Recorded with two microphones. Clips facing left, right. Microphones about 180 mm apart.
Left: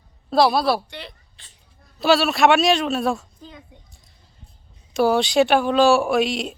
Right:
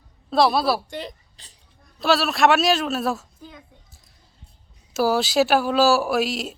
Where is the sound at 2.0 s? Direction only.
Centre (ahead or behind).